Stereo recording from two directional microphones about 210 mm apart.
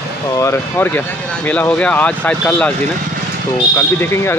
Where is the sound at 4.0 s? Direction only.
10° left (ahead or behind).